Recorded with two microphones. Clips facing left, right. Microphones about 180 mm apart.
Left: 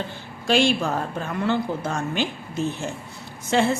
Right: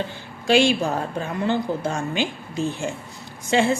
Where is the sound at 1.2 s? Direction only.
15° right (ahead or behind).